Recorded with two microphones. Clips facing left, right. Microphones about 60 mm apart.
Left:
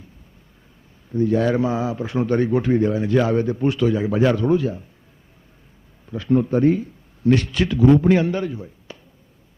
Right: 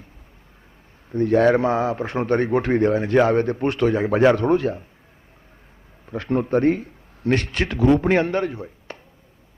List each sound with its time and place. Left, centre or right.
1.1 s a man's voice: right
6.1 s a man's voice: right